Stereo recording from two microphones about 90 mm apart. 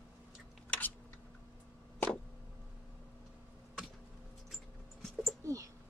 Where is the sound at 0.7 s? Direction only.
20° left (ahead or behind).